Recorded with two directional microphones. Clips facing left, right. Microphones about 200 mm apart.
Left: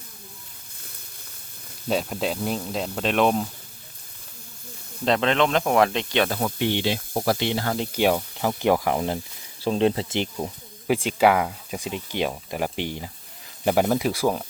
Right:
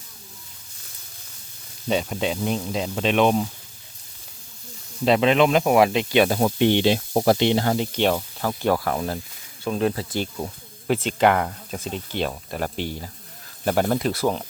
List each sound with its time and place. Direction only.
1.9 s speech: centre (ahead or behind)
5.0 s speech: 10° right (ahead or behind)
6.4 s speech: 25° right (ahead or behind)
7.9 s speech: 10° left (ahead or behind)
9.6 s speech: 30° left (ahead or behind); by 14.4 s 10° left (ahead or behind)